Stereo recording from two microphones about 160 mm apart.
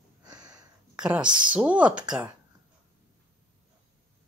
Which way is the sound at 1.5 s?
10° right (ahead or behind).